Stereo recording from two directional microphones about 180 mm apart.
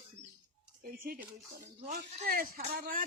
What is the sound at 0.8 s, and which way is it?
Speech, 55° right (ahead or behind).